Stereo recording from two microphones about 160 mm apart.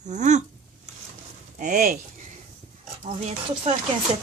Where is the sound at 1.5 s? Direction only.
60° right (ahead or behind).